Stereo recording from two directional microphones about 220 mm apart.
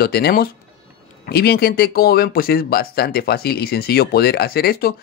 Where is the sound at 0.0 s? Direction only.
45° left (ahead or behind).